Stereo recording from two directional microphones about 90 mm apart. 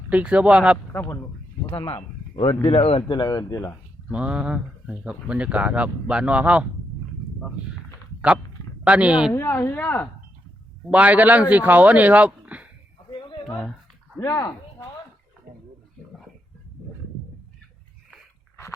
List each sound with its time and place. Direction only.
0.1 s speech: 15° right (ahead or behind)
0.9 s speech: 25° left (ahead or behind)
2.6 s speech: 90° left
3.2 s speech: 40° left (ahead or behind)
4.1 s speech: 15° right (ahead or behind)
8.8 s speech: 15° right (ahead or behind)
9.3 s speech: 25° left (ahead or behind)
10.9 s speech: 15° right (ahead or behind)
13.1 s a sound: 70° left (ahead or behind)
14.2 s speech: 40° left (ahead or behind)